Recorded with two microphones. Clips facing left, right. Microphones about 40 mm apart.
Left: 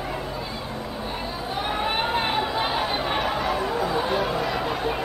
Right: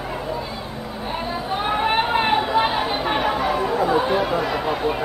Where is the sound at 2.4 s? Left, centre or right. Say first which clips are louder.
Right 5 dB; centre.